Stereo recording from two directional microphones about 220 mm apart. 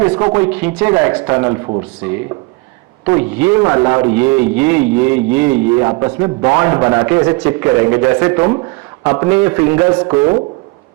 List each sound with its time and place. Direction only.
0.0 s a man's voice: 15° right (ahead or behind)
1.4 s speech: 20° right (ahead or behind)
3.1 s a man's voice: 10° right (ahead or behind)